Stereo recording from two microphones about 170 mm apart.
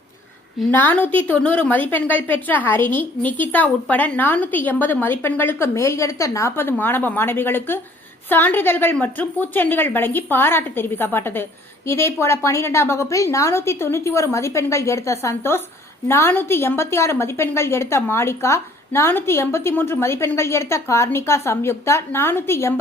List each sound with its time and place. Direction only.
0.7 s a woman's voice: 10° left (ahead or behind)